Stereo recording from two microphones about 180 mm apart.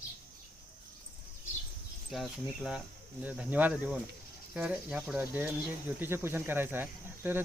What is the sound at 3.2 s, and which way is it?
Speech, 10° right (ahead or behind).